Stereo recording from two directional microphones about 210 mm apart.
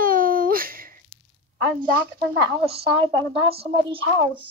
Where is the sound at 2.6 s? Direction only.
25° right (ahead or behind).